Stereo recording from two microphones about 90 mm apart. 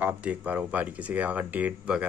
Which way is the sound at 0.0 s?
15° right (ahead or behind).